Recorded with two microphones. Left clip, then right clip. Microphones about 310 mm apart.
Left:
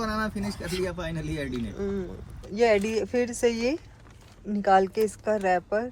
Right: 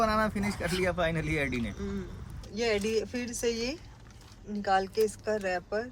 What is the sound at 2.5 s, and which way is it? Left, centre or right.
Speech, centre.